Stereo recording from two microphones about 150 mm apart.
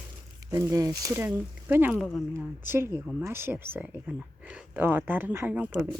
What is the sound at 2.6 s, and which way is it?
Speech, 15° right (ahead or behind).